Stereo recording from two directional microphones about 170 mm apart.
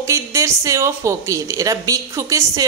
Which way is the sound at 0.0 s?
15° right (ahead or behind).